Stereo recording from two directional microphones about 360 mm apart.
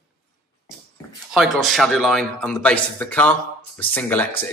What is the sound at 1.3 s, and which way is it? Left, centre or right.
A man's voice, centre.